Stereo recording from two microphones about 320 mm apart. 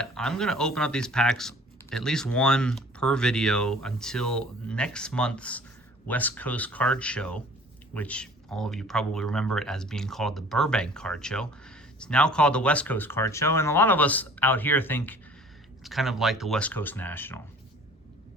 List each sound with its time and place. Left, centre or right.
0.0 s speech: centre